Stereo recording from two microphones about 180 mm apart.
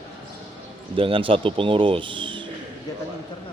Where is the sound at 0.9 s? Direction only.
30° right (ahead or behind).